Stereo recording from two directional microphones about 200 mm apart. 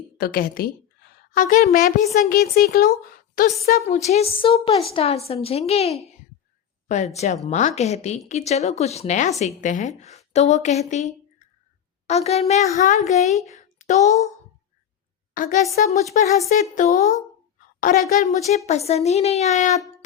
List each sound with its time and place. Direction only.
0.2 s a woman's voice: 50° left (ahead or behind)
2.1 s a woman's voice: 50° left (ahead or behind)
3.8 s a woman's voice: 35° left (ahead or behind)
13.5 s a sound: 35° left (ahead or behind)
15.4 s a woman's voice: 40° left (ahead or behind)